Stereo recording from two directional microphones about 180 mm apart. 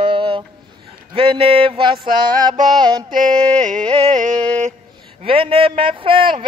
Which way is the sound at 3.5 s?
5° left (ahead or behind).